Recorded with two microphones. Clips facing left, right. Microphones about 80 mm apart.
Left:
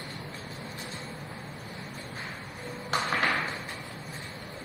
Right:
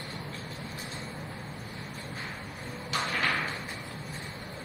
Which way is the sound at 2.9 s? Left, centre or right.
Left.